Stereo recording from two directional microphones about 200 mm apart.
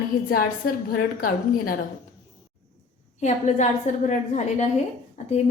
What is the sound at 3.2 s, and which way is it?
A woman's voice, 35° left (ahead or behind).